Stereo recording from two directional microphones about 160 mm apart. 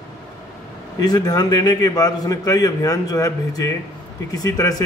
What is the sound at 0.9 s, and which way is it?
A man's voice, 25° left (ahead or behind).